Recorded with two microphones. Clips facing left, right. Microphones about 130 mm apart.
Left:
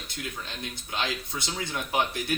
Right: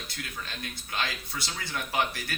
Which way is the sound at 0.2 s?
20° left (ahead or behind).